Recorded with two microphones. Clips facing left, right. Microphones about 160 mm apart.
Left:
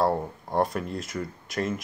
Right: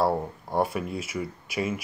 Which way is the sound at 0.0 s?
Centre (ahead or behind).